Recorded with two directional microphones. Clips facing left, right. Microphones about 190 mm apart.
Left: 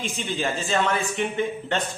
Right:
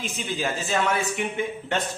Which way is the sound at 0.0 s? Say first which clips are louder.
Left 1 dB; 5° right (ahead or behind).